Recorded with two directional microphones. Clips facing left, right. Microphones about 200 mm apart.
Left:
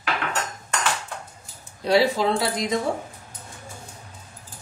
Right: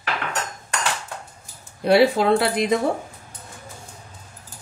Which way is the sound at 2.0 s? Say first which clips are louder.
Right 5 dB; 60° right (ahead or behind).